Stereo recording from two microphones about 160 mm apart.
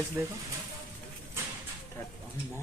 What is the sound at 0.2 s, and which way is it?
Speech, 15° right (ahead or behind).